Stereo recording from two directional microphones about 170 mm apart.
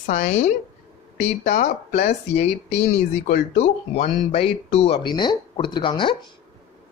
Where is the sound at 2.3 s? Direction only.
40° left (ahead or behind).